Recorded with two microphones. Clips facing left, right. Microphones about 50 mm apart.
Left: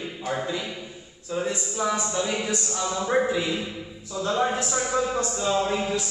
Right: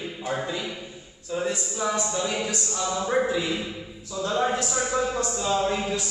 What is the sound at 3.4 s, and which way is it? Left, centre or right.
Speech, centre.